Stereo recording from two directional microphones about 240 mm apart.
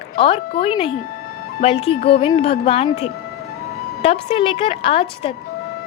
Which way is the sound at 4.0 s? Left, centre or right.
Left.